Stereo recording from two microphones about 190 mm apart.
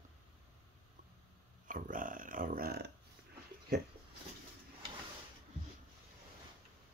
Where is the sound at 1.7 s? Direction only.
45° right (ahead or behind).